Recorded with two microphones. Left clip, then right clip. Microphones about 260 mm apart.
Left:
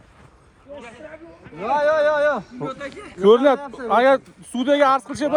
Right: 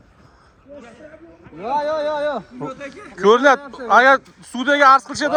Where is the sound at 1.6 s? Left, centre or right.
Left.